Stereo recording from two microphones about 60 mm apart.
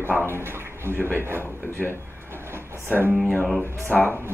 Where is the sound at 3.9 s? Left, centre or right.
Left.